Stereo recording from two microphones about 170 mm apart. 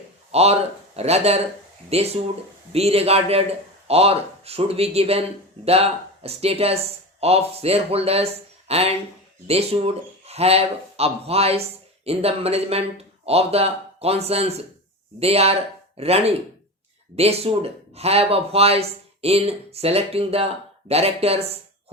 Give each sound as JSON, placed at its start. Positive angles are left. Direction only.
{"t": 0.3, "sound": "speech", "side_deg": -40}